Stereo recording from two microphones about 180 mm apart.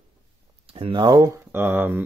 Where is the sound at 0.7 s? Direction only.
30° right (ahead or behind); by 2.0 s 10° right (ahead or behind).